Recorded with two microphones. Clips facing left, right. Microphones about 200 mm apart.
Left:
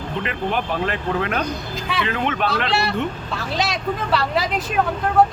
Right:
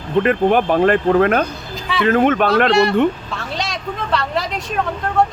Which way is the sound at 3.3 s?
5° left (ahead or behind).